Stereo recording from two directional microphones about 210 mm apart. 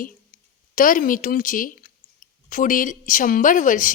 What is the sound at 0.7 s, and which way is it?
A woman's voice, 40° left (ahead or behind).